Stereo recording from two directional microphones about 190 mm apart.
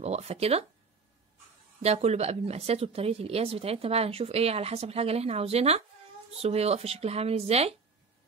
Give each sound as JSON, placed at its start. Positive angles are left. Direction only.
{"t": 0.0, "sound": "a woman's voice", "side_deg": -35}
{"t": 1.8, "sound": "a woman's voice", "side_deg": -35}